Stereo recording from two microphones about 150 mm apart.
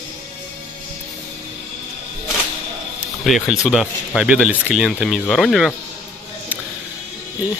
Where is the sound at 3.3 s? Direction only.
Centre (ahead or behind).